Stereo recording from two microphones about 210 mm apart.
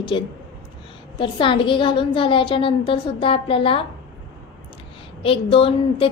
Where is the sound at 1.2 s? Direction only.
25° left (ahead or behind).